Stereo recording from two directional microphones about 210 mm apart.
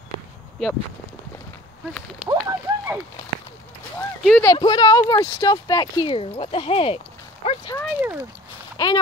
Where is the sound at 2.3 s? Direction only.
15° right (ahead or behind).